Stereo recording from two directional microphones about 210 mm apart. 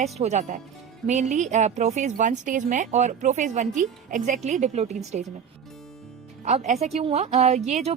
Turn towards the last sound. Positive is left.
turn(degrees=-30)  # may be behind; listen again after turning